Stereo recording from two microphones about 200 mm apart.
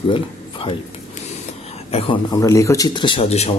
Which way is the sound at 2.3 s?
15° left (ahead or behind).